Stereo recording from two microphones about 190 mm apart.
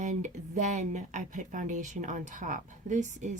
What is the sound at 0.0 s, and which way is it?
Speech, 40° right (ahead or behind).